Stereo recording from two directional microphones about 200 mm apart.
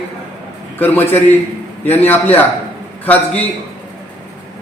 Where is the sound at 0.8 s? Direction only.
10° left (ahead or behind).